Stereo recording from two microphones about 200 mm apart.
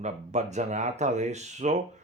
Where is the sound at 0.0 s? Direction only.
35° right (ahead or behind).